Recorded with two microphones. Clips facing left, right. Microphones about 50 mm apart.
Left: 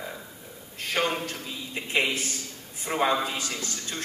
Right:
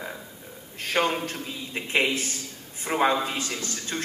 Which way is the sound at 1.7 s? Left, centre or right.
Right.